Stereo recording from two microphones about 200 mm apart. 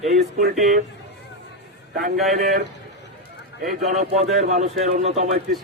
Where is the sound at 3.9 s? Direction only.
35° right (ahead or behind).